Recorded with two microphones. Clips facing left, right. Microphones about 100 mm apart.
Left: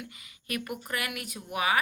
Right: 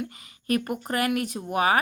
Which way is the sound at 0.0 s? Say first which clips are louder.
Right 10 dB; 40° right (ahead or behind).